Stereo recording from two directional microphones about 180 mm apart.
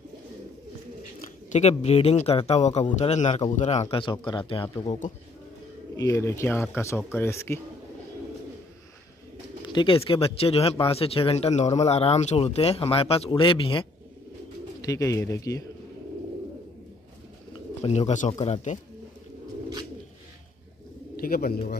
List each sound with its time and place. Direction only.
1.5 s speech: 40° left (ahead or behind)
5.9 s speech: 15° left (ahead or behind)
9.7 s speech: 25° left (ahead or behind)
14.8 s speech: 20° left (ahead or behind)
17.8 s speech: 35° left (ahead or behind)
21.2 s speech: 55° left (ahead or behind)